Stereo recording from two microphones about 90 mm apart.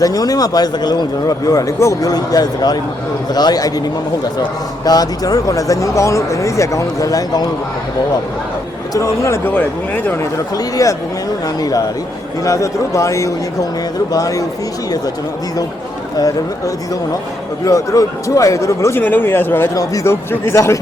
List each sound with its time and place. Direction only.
0.0 s a man's voice: 45° left (ahead or behind)
4.9 s speech: 45° left (ahead or behind)
8.9 s speech: 35° left (ahead or behind)
9.5 s speech: 20° left (ahead or behind)
10.3 s speech: 40° left (ahead or behind)
12.5 s speech: 35° left (ahead or behind)
16.1 s a man's voice: 40° left (ahead or behind); by 19.7 s 25° left (ahead or behind)
19.7 s speech: 40° left (ahead or behind)
20.1 s speech: 30° left (ahead or behind)